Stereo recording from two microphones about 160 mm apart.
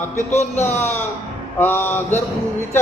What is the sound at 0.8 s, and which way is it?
Speech, 15° left (ahead or behind).